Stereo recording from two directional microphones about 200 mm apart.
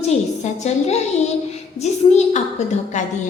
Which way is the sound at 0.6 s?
35° left (ahead or behind).